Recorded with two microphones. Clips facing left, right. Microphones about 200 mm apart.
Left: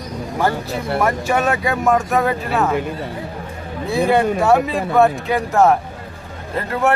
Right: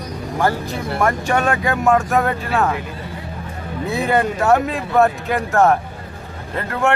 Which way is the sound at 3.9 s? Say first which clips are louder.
Left 3 dB; centre (ahead or behind).